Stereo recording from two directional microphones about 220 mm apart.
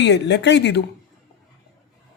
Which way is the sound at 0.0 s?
50° left (ahead or behind).